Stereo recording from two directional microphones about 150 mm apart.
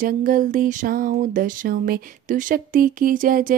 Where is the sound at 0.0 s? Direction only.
65° right (ahead or behind).